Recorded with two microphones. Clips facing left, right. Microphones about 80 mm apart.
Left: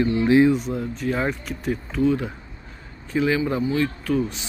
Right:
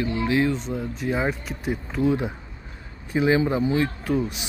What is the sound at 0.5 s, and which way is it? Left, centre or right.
Speech, centre.